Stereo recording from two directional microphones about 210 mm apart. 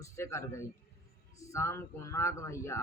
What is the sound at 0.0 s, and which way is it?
A man's voice, 15° left (ahead or behind).